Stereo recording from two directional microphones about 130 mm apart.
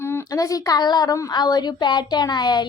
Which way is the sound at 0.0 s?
20° left (ahead or behind).